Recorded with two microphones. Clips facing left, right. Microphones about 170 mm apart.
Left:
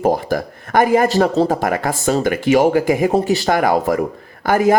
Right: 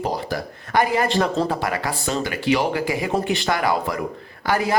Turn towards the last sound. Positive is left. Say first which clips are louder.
# left 7 dB
turn(degrees=50)  # may be behind; listen again after turning